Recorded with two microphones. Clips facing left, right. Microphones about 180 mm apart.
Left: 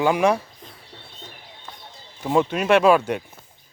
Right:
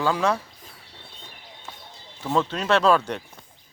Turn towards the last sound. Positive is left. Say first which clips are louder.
# left 4 dB
turn(degrees=10)  # may be behind; listen again after turning